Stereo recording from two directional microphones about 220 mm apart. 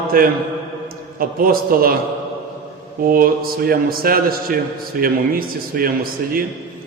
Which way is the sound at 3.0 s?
40° right (ahead or behind).